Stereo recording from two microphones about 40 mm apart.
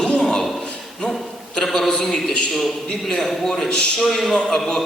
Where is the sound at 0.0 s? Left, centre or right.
Left.